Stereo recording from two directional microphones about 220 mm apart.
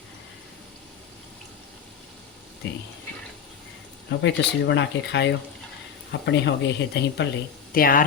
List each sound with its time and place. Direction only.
2.6 s speech: 50° left (ahead or behind)
4.2 s speech: 50° left (ahead or behind)
7.7 s speech: 40° left (ahead or behind)